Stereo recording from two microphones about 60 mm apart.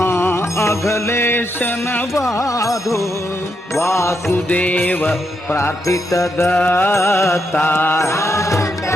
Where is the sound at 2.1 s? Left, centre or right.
Left.